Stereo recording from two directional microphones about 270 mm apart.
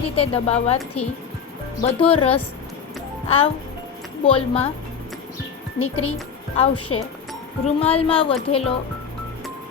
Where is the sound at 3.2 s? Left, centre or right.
Left.